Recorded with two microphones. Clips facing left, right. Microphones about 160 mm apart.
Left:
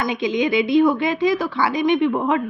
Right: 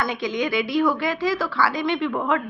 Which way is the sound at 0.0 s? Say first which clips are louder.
Left 4 dB; 20° left (ahead or behind).